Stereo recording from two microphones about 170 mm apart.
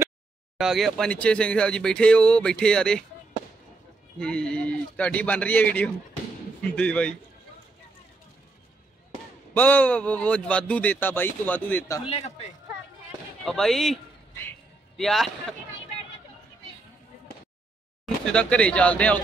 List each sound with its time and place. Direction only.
0.6 s speech: centre (ahead or behind)
4.2 s speech: 5° left (ahead or behind)
9.5 s speech: 10° left (ahead or behind)
12.1 s speech: 40° left (ahead or behind)
13.5 s speech: centre (ahead or behind)
15.0 s speech: centre (ahead or behind)
18.3 s speech: 5° left (ahead or behind)